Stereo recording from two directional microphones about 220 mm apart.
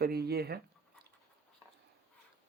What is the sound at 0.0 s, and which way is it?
Speech, 45° right (ahead or behind).